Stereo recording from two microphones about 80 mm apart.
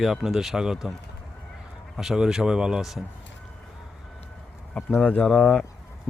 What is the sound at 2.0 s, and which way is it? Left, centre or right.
Speech, centre.